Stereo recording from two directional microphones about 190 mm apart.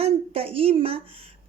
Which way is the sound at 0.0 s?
30° right (ahead or behind).